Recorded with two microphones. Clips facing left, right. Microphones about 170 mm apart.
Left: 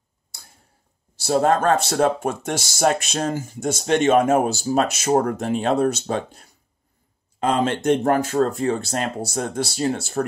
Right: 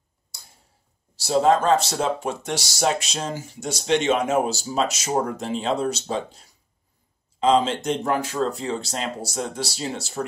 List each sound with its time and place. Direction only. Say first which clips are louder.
1.1 s speech: even; 55° left (ahead or behind)